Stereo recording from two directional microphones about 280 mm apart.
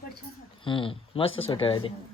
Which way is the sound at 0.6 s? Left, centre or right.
Centre.